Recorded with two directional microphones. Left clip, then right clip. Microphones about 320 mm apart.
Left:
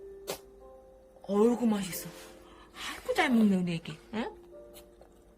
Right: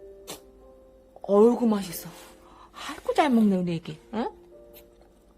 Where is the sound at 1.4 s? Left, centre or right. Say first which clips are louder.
Right 6 dB; centre.